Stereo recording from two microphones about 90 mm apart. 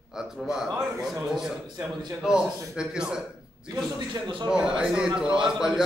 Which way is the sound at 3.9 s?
55° right (ahead or behind).